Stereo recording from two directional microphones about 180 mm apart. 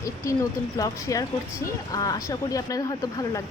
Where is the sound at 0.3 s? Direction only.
15° left (ahead or behind).